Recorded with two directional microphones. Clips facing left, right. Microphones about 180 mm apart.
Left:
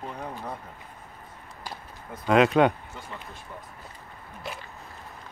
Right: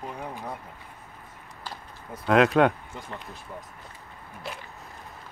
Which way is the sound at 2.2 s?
Centre (ahead or behind).